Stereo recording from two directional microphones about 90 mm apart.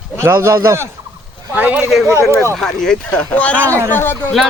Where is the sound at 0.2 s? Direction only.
30° right (ahead or behind).